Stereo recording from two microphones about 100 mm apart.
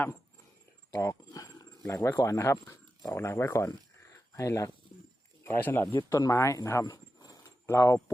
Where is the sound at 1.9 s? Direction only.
25° left (ahead or behind).